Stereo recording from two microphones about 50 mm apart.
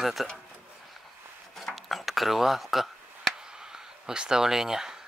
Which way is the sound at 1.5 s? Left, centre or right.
Centre.